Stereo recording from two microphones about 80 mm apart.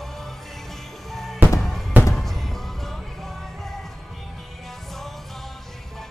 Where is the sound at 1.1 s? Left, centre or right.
Centre.